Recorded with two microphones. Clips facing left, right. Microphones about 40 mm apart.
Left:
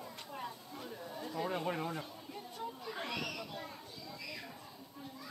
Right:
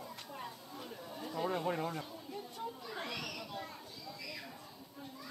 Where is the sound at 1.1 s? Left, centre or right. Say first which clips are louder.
Right 1 dB; centre.